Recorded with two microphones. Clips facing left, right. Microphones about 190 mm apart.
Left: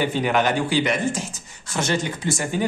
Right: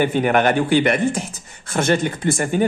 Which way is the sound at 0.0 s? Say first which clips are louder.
Right 4 dB; 55° right (ahead or behind).